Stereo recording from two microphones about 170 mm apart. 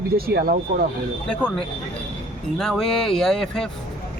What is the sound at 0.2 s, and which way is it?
Speech, 65° right (ahead or behind).